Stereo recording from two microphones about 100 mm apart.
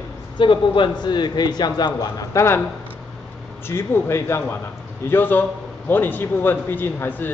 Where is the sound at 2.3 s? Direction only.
25° left (ahead or behind).